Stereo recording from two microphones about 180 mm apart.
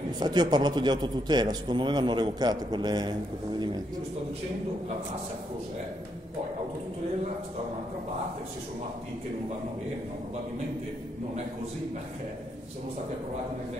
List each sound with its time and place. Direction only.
0.2 s a man's voice: 25° right (ahead or behind)